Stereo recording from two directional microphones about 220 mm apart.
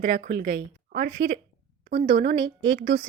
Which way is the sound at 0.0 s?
40° right (ahead or behind).